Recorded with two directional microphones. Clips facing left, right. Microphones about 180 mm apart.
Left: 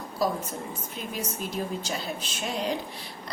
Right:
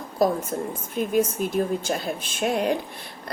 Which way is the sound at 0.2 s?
55° right (ahead or behind).